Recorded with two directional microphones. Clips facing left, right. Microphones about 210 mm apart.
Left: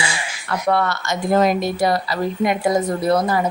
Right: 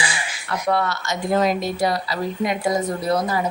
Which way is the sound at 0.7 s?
55° left (ahead or behind).